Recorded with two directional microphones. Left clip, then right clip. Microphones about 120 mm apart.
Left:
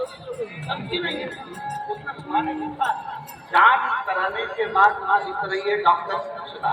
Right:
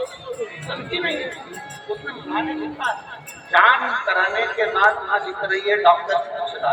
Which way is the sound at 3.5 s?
30° right (ahead or behind).